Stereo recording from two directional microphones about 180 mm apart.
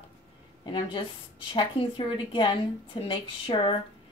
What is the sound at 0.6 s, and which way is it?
Speech, 30° left (ahead or behind).